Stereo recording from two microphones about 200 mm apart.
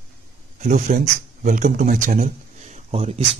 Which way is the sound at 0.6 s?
40° right (ahead or behind).